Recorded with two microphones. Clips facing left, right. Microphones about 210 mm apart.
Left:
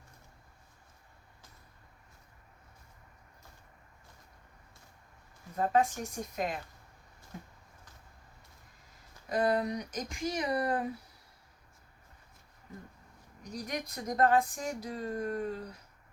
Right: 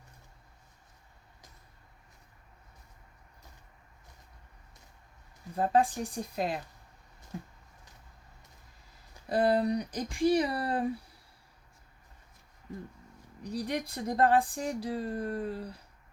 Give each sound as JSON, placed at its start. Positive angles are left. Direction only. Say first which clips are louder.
{"t": 5.5, "sound": "speech", "louder": "right 2 dB", "side_deg": -30}
{"t": 9.3, "sound": "speech", "louder": "right 3 dB", "side_deg": -30}
{"t": 13.4, "sound": "speech", "louder": "right 5 dB", "side_deg": -30}